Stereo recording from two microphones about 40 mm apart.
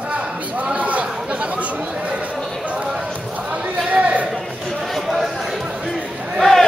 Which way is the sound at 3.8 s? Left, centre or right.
Right.